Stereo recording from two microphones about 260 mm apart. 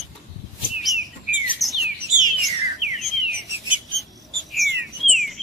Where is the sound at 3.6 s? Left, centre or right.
Centre.